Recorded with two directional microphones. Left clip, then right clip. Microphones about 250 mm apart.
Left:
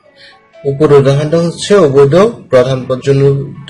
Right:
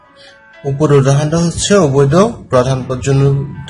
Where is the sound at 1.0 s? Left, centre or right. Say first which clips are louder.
Left 4 dB; right.